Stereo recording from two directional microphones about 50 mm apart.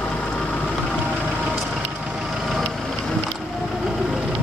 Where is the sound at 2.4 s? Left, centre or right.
Centre.